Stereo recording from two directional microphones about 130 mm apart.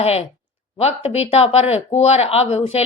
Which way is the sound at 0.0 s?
50° left (ahead or behind).